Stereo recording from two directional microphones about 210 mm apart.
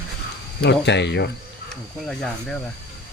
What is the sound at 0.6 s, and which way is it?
Speech, 55° left (ahead or behind).